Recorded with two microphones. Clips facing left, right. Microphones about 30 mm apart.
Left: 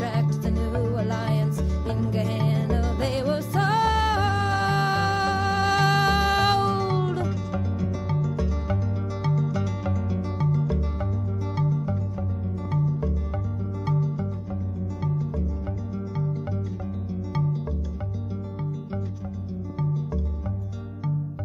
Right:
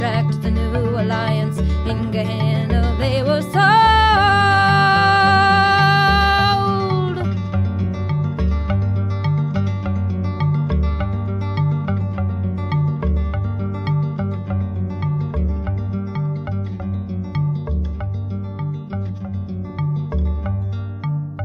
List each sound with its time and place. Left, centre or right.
0.0 s music: right
5.7 s music: right
10.4 s music: right
11.5 s music: right
17.1 s music: right